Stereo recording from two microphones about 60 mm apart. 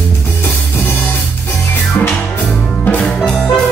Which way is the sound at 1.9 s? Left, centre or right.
Left.